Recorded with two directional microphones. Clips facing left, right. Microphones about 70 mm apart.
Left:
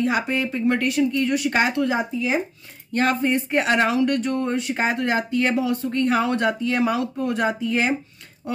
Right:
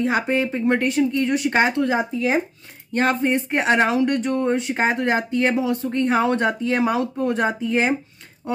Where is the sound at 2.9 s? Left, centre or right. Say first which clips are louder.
Right 1 dB; right.